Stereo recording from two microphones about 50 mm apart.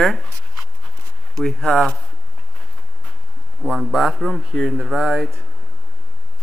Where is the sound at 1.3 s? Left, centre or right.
Centre.